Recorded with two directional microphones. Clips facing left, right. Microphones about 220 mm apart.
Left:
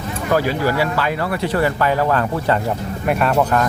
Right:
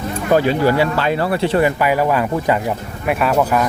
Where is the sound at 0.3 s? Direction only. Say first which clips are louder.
Right 4 dB; 25° right (ahead or behind).